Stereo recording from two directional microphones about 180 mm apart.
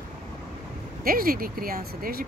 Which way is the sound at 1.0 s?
55° right (ahead or behind).